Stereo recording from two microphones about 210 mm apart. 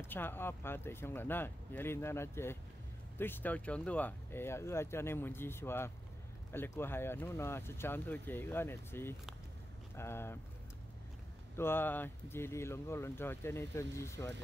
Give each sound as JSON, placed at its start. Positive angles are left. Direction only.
{"t": 0.1, "sound": "speech", "side_deg": 10}
{"t": 11.5, "sound": "speech", "side_deg": 10}